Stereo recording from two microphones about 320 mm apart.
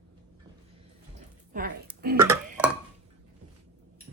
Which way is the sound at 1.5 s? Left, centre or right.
Right.